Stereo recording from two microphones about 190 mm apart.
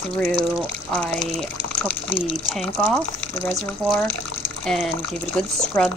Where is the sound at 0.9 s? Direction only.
5° left (ahead or behind).